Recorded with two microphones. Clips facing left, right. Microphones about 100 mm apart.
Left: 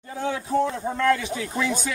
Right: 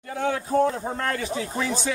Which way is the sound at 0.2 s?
50° right (ahead or behind).